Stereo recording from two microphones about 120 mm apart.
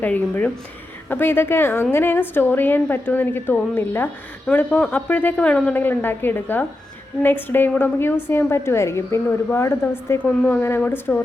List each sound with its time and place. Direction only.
0.0 s a woman's voice: 15° left (ahead or behind)